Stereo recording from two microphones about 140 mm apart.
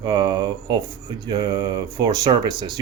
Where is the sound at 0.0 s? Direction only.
30° right (ahead or behind).